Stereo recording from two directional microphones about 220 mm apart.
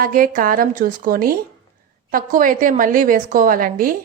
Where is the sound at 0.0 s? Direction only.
40° right (ahead or behind).